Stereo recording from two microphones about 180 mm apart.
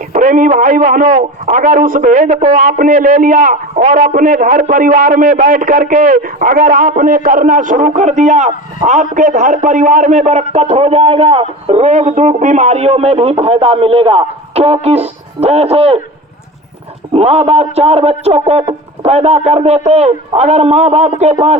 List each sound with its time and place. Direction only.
0.1 s a man's voice: 45° right (ahead or behind)
17.2 s a man's voice: 35° right (ahead or behind)